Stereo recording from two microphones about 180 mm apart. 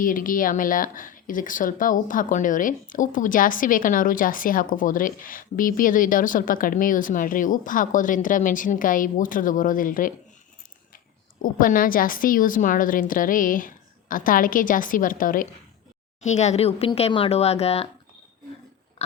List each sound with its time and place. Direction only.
0.0 s speech: 50° left (ahead or behind)
11.4 s speech: 50° left (ahead or behind)
16.2 s speech: 40° left (ahead or behind)